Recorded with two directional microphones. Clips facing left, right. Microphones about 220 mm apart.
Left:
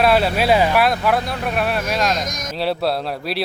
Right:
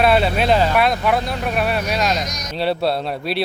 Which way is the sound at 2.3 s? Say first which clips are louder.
Left 2 dB; 50° left (ahead or behind).